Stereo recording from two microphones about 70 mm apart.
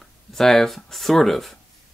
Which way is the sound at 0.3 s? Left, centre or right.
Centre.